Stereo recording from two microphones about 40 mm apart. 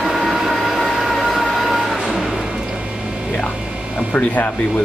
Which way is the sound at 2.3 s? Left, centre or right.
Centre.